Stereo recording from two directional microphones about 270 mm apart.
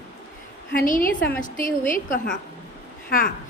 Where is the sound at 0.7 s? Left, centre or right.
Left.